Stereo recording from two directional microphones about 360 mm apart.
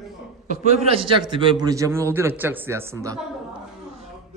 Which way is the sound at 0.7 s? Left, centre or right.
Centre.